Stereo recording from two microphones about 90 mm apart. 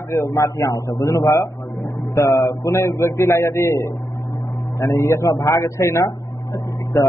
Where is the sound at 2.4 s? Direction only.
35° left (ahead or behind).